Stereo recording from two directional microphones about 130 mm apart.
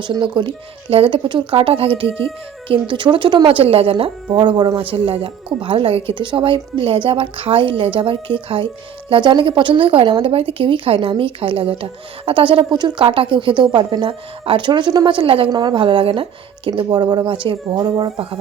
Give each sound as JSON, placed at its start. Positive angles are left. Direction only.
{"t": 0.0, "sound": "speech", "side_deg": -35}
{"t": 4.4, "sound": "speech", "side_deg": -35}